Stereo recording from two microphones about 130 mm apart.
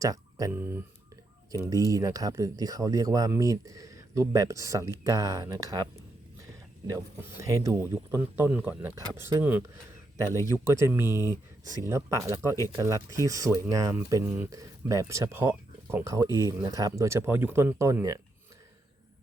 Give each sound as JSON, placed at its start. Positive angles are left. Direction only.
{"t": 0.0, "sound": "speech", "side_deg": -30}
{"t": 0.5, "sound": "speech", "side_deg": -15}
{"t": 14.5, "sound": "speech", "side_deg": -25}